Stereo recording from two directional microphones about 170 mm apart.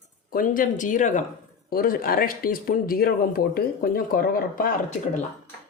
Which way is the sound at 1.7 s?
60° left (ahead or behind).